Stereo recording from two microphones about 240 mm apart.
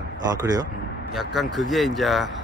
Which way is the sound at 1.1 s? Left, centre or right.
Centre.